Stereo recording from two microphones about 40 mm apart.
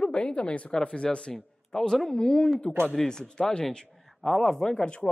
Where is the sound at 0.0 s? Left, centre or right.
Left.